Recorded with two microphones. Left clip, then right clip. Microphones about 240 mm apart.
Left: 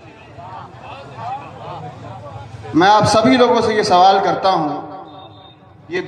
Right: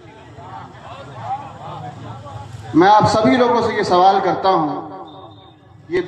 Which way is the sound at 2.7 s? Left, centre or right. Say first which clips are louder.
Even; left.